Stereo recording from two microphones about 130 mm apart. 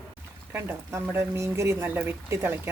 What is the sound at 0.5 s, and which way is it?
A woman's voice, 20° right (ahead or behind).